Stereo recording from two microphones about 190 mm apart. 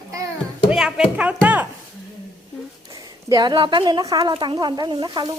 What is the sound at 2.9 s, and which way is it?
A woman's voice, 20° right (ahead or behind).